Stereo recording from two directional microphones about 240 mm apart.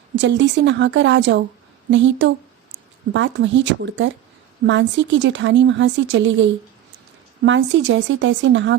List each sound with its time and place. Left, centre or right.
0.2 s speech: right